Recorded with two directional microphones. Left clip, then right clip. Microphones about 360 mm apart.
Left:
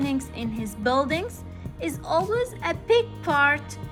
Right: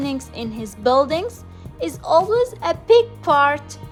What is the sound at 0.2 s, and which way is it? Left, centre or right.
Speech, centre.